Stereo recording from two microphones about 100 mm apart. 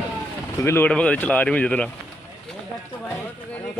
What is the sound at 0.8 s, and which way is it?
Speech, 10° left (ahead or behind).